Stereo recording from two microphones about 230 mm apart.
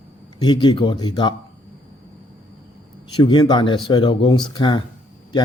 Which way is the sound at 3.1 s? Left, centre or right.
Centre.